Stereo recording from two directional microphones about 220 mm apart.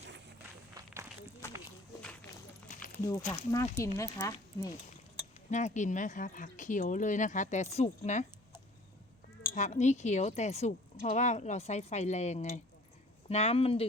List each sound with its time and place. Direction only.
2.7 s a sound: 35° left (ahead or behind)
3.1 s speech: 15° left (ahead or behind)
5.5 s speech: 35° left (ahead or behind)
9.6 s speech: 30° left (ahead or behind)